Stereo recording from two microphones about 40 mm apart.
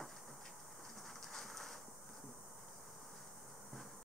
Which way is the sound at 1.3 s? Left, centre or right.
Centre.